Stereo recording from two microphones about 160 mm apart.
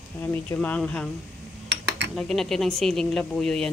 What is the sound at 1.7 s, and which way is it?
Cutlery, 90° right.